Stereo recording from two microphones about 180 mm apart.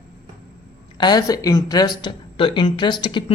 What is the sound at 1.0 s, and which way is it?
A woman's voice, 20° left (ahead or behind).